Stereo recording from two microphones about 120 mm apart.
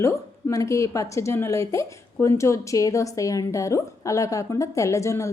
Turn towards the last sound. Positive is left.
turn(degrees=25)  # may be behind; listen again after turning